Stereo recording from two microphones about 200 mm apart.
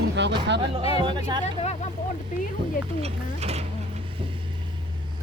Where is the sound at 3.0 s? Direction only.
30° right (ahead or behind).